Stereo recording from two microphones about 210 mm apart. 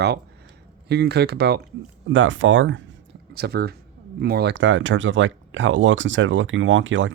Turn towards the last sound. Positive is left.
turn(degrees=-65)  # may be behind; listen again after turning